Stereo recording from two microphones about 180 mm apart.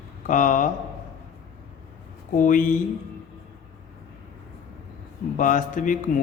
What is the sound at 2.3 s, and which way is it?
Speech, 45° left (ahead or behind).